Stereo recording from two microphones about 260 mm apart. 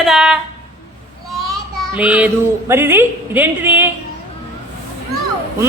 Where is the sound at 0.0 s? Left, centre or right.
Centre.